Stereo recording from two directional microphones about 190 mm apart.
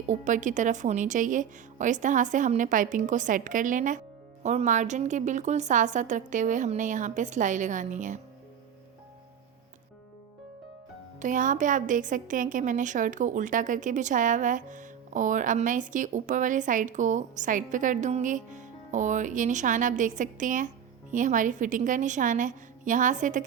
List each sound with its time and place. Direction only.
0.1 s a woman's voice: 40° right (ahead or behind)
11.2 s a woman's voice: 40° right (ahead or behind)